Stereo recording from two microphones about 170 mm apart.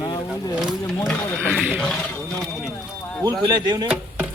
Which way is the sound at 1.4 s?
5° right (ahead or behind).